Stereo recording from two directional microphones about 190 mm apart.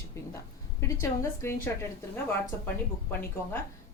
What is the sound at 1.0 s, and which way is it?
Speech, 15° left (ahead or behind).